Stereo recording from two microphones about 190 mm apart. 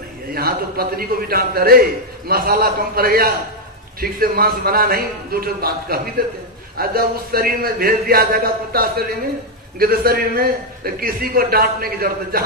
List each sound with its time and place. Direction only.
0.3 s a man's voice: 50° right (ahead or behind)